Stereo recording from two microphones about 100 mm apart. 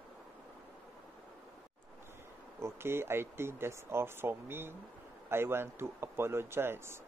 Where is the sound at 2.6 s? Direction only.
25° right (ahead or behind).